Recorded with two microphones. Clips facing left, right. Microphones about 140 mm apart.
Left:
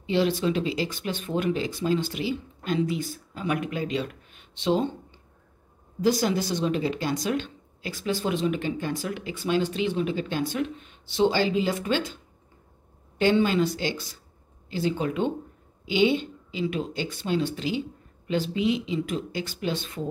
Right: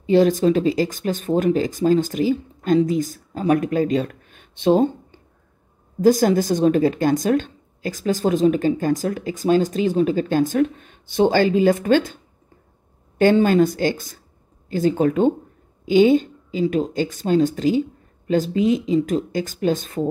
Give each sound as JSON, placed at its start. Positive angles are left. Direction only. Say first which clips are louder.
{"t": 0.0, "sound": "speech", "louder": "right 8 dB", "side_deg": -45}
{"t": 13.2, "sound": "speech", "louder": "right 7 dB", "side_deg": -45}